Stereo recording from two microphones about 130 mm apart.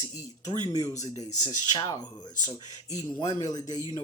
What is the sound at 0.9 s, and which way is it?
Speech, 60° left (ahead or behind).